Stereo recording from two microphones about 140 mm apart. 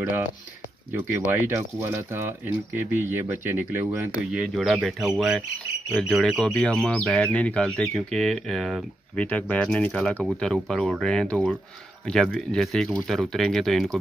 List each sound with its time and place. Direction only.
0.9 s speech: 15° right (ahead or behind)
4.3 s speech: 5° right (ahead or behind)